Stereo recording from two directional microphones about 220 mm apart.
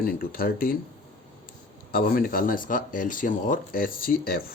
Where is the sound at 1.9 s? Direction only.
40° left (ahead or behind).